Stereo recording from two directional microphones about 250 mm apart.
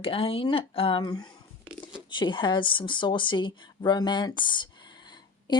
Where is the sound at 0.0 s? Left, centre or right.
Left.